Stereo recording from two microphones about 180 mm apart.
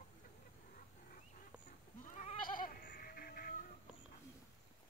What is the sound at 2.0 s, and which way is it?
Goat, 45° left (ahead or behind).